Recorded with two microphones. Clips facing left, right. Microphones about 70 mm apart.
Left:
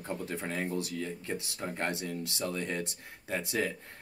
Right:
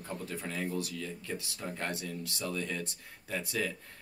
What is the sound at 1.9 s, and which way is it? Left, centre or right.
Speech, left.